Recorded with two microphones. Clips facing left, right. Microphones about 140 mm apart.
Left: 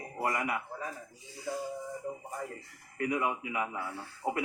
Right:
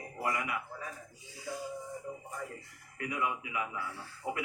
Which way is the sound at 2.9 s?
40° left (ahead or behind).